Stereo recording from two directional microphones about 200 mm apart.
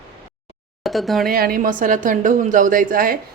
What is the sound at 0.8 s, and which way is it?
Speech, centre (ahead or behind).